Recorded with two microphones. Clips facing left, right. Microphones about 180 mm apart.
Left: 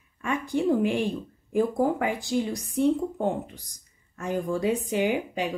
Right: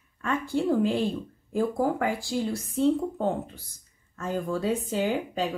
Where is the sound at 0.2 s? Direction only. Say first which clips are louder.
Left 1 dB; 15° left (ahead or behind).